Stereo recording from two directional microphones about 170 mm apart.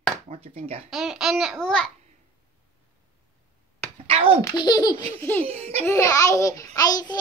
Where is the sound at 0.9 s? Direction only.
Centre (ahead or behind).